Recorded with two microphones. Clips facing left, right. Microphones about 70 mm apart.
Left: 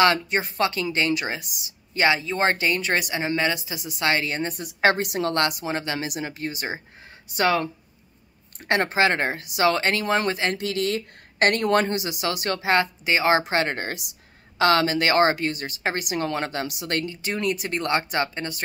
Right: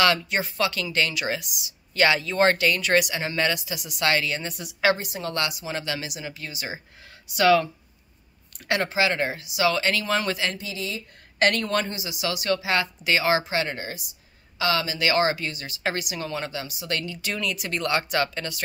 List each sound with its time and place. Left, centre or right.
0.0 s a woman's voice: left
2.0 s a woman's voice: centre; by 5.7 s left
5.7 s a woman's voice: left
6.0 s a woman's voice: left
10.6 s speech: left
11.3 s a woman's voice: left
11.8 s speech: left
13.0 s a woman's voice: left
13.4 s speech: left
14.6 s speech: left
16.8 s speech: left
17.1 s a woman's voice: left